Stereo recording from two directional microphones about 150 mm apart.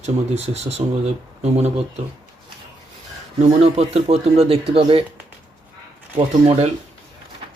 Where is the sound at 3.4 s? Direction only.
45° right (ahead or behind).